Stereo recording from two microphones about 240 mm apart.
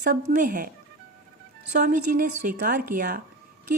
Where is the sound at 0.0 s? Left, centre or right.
Right.